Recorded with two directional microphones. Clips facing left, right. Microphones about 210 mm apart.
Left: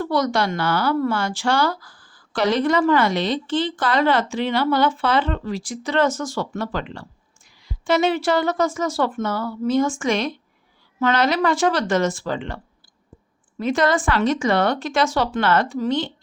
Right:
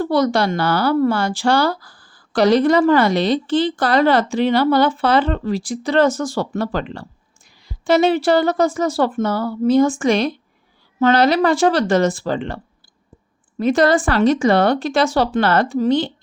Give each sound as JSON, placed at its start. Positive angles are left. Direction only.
{"t": 0.0, "sound": "a woman's voice", "side_deg": -30}
{"t": 13.6, "sound": "a woman's voice", "side_deg": -35}